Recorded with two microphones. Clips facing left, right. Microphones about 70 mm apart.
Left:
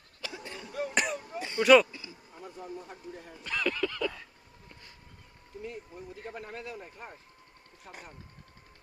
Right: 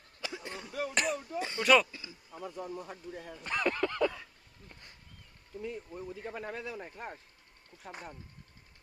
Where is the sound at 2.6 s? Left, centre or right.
Right.